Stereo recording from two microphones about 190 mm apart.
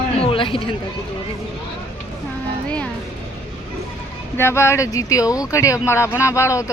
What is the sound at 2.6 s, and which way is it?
Speech, 5° left (ahead or behind).